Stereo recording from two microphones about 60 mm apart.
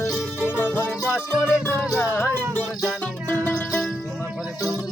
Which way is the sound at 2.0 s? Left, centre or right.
Left.